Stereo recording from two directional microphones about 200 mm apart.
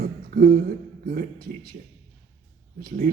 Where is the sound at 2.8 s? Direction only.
45° right (ahead or behind).